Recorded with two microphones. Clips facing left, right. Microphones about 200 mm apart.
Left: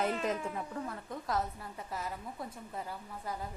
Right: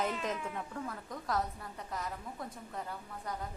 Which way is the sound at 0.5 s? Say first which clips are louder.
Left 2 dB; centre (ahead or behind).